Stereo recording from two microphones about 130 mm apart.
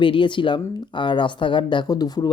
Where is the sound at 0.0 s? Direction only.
40° left (ahead or behind).